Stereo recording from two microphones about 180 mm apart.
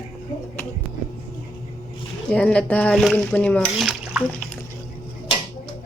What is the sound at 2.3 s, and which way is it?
Speech, 5° left (ahead or behind).